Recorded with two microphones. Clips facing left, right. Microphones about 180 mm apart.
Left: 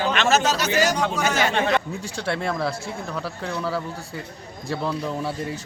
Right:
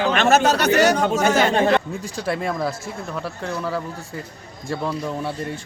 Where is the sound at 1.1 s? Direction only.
50° right (ahead or behind).